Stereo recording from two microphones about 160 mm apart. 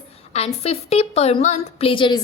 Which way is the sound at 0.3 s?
40° left (ahead or behind).